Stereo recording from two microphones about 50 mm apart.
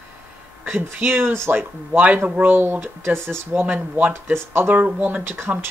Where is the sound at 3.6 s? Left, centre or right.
Right.